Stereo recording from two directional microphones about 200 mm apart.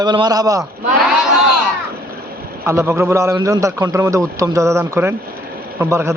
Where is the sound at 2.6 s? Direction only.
15° right (ahead or behind).